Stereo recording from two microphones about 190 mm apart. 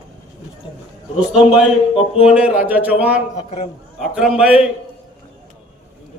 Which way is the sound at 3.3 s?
30° left (ahead or behind).